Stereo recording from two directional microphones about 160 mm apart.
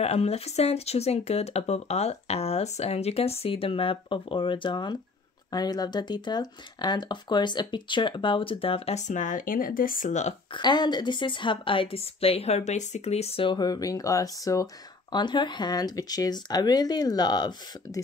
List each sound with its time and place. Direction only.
0.0 s speech: 40° left (ahead or behind)
10.5 s a woman's voice: 25° left (ahead or behind)